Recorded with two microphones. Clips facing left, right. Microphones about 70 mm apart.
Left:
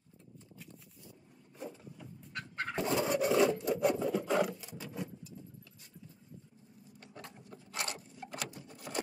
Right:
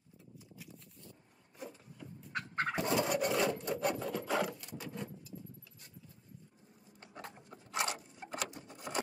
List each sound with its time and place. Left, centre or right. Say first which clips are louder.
0.4 s horse: even; centre
1.6 s vehicle: left 3 dB; centre
2.3 s fowl: right 4 dB; right
2.7 s filing: left 2 dB; centre
7.0 s sewing machine: right 2 dB; right